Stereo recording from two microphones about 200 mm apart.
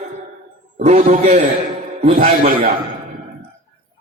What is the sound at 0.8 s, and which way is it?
Speech, 35° right (ahead or behind).